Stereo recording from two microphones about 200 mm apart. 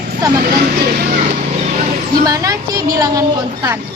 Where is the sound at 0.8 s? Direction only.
50° right (ahead or behind).